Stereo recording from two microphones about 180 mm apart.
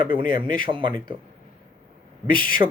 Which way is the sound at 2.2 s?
25° right (ahead or behind).